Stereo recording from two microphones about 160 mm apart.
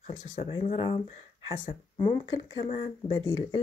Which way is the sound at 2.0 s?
25° left (ahead or behind).